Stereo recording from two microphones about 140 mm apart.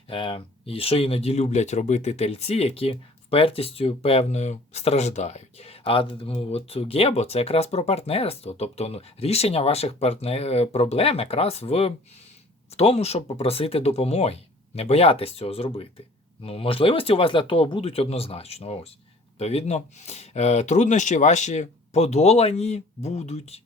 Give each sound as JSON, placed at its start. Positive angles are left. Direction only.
{"t": 0.1, "sound": "speech", "side_deg": 40}